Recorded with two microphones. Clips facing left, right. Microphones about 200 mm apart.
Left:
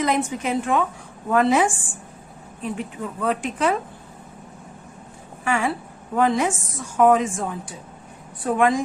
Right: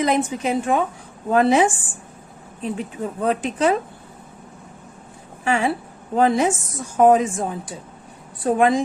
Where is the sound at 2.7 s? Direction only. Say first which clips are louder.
Right 3 dB; 20° right (ahead or behind).